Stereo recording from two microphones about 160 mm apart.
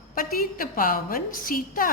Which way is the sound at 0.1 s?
60° left (ahead or behind).